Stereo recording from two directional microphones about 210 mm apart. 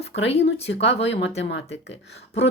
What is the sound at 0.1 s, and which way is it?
Speech, 60° left (ahead or behind).